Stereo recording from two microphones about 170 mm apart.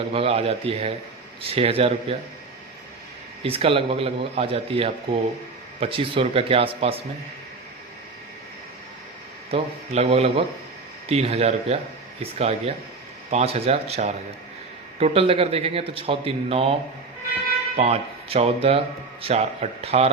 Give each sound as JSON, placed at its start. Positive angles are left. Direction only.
{"t": 0.1, "sound": "speech", "side_deg": -35}
{"t": 3.4, "sound": "speech", "side_deg": -35}
{"t": 9.5, "sound": "speech", "side_deg": -35}
{"t": 17.7, "sound": "speech", "side_deg": -40}